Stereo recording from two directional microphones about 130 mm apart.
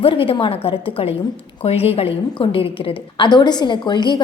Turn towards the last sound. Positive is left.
turn(degrees=35)  # may be behind; listen again after turning